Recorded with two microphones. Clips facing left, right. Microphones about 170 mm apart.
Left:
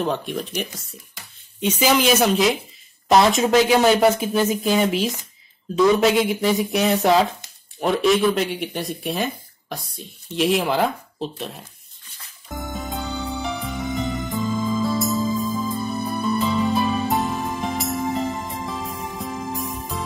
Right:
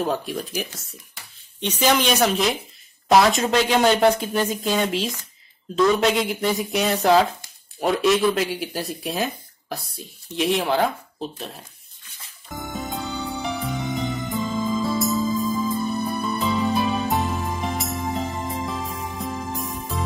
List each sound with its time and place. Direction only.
0.0 s speech: 5° right (ahead or behind)
12.7 s music: centre (ahead or behind)